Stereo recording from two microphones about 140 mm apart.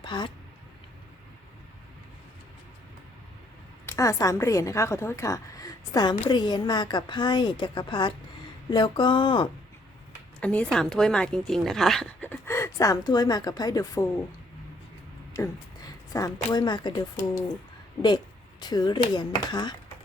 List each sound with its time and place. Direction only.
0.0 s a sound: 35° left (ahead or behind)
3.8 s a woman's voice: 20° left (ahead or behind)
10.4 s a woman's voice: 10° left (ahead or behind)
12.2 s a woman's voice: 15° left (ahead or behind)
15.3 s speech: 25° left (ahead or behind)
18.6 s a woman's voice: 30° left (ahead or behind)